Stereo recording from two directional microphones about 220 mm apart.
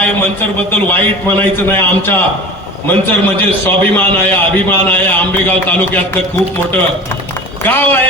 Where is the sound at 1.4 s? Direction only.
10° left (ahead or behind).